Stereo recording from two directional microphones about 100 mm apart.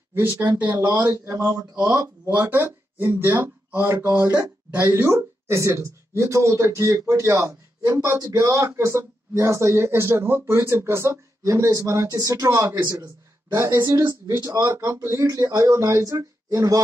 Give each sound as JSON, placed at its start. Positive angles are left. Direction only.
{"t": 0.1, "sound": "speech", "side_deg": -20}
{"t": 0.7, "sound": "speech", "side_deg": -40}
{"t": 2.2, "sound": "speech", "side_deg": -20}